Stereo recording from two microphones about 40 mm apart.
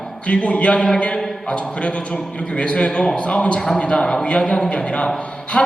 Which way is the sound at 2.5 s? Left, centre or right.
Left.